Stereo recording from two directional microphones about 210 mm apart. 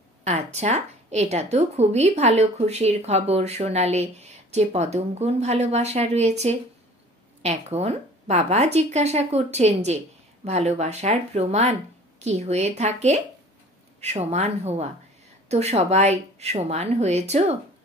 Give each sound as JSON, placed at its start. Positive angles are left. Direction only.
{"t": 0.2, "sound": "a woman's voice", "side_deg": -30}